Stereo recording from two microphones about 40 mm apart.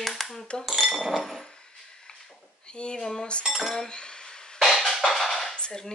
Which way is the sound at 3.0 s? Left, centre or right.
Centre.